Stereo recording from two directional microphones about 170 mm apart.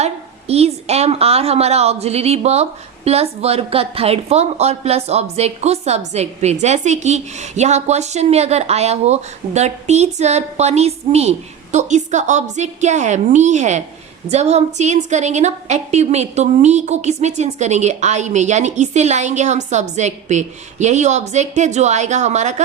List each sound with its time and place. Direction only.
0.0 s a woman's voice: 40° right (ahead or behind)